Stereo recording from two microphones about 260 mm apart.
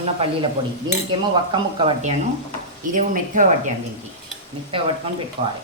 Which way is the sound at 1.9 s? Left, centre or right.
Right.